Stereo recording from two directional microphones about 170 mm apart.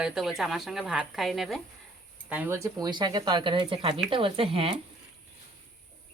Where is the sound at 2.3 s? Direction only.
10° right (ahead or behind); by 4.8 s 35° right (ahead or behind).